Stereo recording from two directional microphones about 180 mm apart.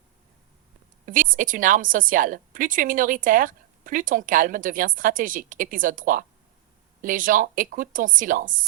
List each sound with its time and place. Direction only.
1.0 s a woman's voice: 50° right (ahead or behind)